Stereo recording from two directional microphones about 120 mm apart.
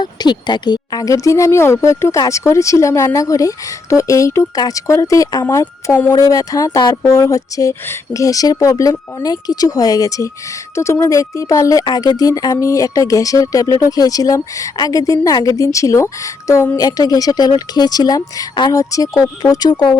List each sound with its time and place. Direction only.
0.0 s speech: 35° left (ahead or behind)